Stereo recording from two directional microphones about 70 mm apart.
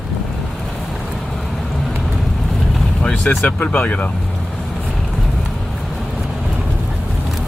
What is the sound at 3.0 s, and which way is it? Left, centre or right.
Speech, centre.